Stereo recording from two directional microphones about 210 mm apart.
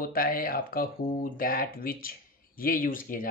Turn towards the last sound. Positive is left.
turn(degrees=40)  # may be behind; listen again after turning